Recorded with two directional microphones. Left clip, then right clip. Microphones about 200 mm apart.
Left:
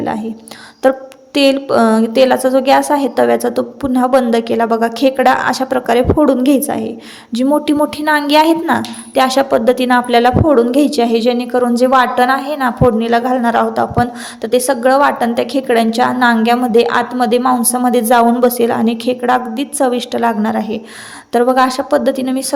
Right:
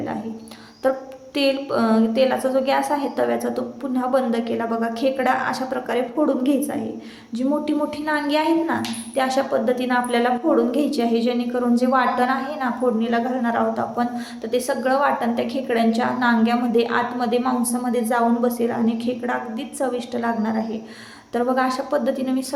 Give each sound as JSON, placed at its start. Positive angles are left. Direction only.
{"t": 0.8, "sound": "a woman's voice", "side_deg": 40}